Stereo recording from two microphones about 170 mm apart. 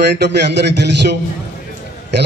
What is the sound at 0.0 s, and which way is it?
A man's voice, 85° right.